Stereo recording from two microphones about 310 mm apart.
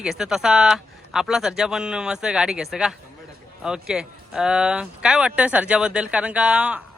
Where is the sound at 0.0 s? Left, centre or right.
Centre.